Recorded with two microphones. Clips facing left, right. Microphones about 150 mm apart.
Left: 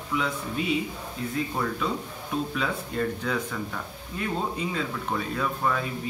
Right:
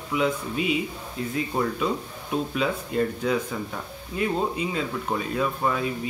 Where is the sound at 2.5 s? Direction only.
15° right (ahead or behind).